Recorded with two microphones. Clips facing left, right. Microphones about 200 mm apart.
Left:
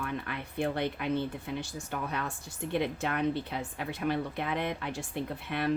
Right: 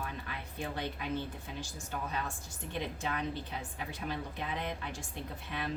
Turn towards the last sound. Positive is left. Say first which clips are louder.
# left 7 dB
turn(degrees=65)  # may be behind; listen again after turning